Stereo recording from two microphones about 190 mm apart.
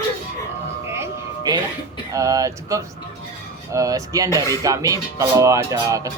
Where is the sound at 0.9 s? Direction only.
15° right (ahead or behind).